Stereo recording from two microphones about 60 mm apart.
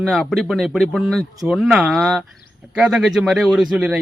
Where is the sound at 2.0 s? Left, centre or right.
Centre.